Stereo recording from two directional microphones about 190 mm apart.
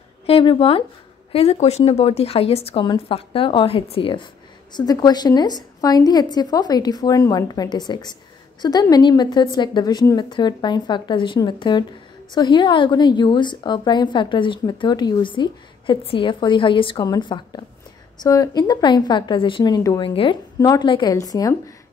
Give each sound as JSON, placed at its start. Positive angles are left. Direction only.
{"t": 0.3, "sound": "a woman's voice", "side_deg": 30}